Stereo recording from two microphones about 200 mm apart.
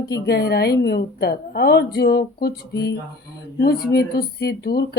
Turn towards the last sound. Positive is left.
turn(degrees=50)  # may be behind; listen again after turning